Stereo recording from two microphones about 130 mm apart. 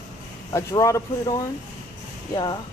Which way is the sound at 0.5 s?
25° left (ahead or behind).